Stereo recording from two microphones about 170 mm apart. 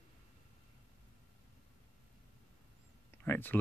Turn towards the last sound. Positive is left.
turn(degrees=10)  # may be behind; listen again after turning